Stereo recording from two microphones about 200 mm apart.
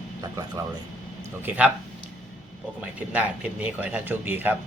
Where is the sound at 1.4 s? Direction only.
5° right (ahead or behind).